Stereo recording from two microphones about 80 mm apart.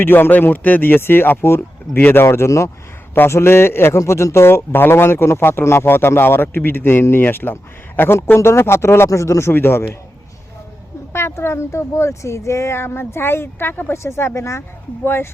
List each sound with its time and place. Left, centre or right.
0.0 s a man's voice: left
11.1 s a man's voice: left